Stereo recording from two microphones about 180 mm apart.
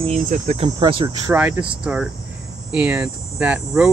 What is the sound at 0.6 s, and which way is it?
Cricket, 25° right (ahead or behind).